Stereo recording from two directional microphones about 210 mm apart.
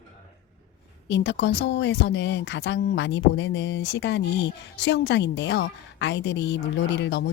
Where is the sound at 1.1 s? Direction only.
55° left (ahead or behind).